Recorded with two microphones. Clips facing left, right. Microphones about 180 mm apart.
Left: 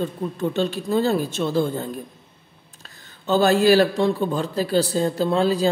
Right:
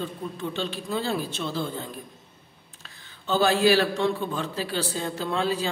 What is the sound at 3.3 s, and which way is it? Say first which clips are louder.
Speech: left 5 dB; 45° left (ahead or behind).